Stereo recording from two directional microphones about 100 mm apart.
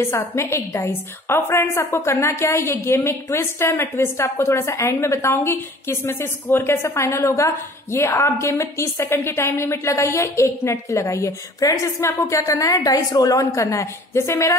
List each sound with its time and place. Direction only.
0.0 s a woman's voice: 25° left (ahead or behind)